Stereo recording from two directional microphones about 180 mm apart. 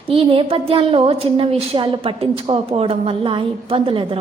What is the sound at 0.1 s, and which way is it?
A woman's voice, 30° right (ahead or behind).